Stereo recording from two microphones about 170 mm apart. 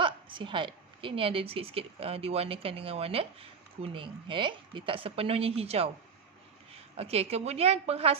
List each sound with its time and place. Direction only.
0.0 s a woman's voice: 30° right (ahead or behind)